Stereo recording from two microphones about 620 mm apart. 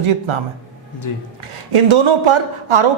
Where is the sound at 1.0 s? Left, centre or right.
Left.